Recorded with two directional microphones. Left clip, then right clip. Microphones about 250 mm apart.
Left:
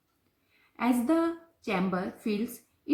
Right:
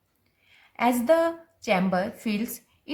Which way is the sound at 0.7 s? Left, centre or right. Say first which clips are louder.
Right 6 dB; right.